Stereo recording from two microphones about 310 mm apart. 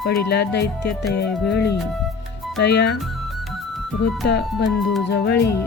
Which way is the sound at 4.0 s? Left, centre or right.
Left.